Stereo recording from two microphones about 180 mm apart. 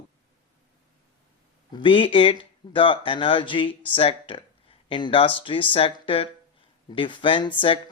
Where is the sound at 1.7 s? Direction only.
30° left (ahead or behind).